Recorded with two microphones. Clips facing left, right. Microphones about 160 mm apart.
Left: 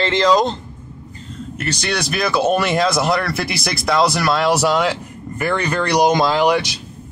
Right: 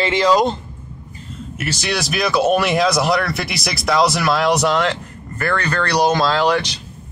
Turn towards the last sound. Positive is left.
turn(degrees=10)  # may be behind; listen again after turning